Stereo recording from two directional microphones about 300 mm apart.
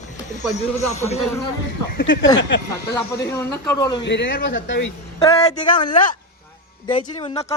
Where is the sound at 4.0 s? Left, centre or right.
Left.